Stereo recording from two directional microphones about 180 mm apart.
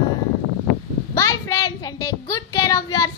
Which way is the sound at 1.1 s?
15° left (ahead or behind).